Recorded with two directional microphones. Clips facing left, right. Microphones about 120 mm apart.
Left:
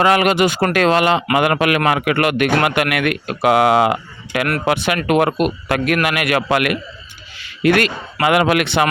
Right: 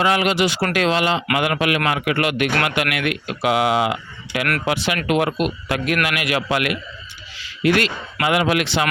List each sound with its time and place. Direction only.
0.0 s a man's voice: 55° left (ahead or behind)